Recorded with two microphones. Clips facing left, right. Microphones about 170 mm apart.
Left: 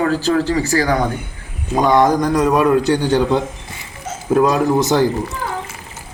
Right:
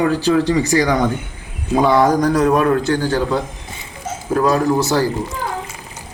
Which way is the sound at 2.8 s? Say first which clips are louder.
Left 3 dB; 20° left (ahead or behind).